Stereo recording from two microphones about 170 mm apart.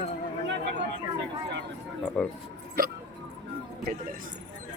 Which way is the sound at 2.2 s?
10° left (ahead or behind).